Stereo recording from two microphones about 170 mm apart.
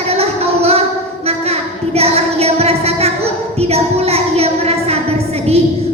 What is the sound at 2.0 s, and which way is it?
Child singing, 35° right (ahead or behind).